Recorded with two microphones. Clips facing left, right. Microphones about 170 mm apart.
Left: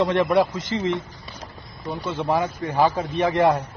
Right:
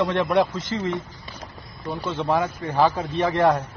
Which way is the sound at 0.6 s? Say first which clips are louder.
Left 2 dB; 20° left (ahead or behind).